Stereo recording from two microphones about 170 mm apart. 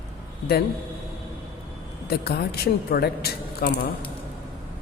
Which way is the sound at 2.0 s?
65° left (ahead or behind).